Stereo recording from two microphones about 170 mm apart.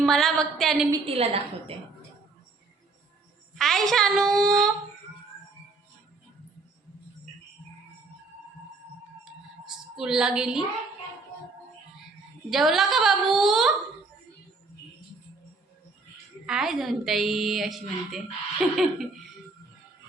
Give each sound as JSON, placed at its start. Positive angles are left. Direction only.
{"t": 0.0, "sound": "a woman's voice", "side_deg": 0}
{"t": 1.0, "sound": "a woman's voice", "side_deg": -35}
{"t": 3.5, "sound": "a woman's voice", "side_deg": 0}
{"t": 9.6, "sound": "a woman's voice", "side_deg": -5}
{"t": 12.5, "sound": "a woman's voice", "side_deg": 0}
{"t": 16.5, "sound": "a woman's voice", "side_deg": 0}